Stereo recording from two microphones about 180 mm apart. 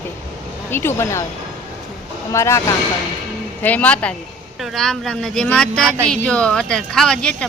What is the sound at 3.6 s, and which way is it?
Speech, 10° left (ahead or behind).